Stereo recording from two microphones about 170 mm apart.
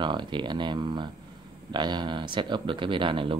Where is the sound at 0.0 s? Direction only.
25° right (ahead or behind).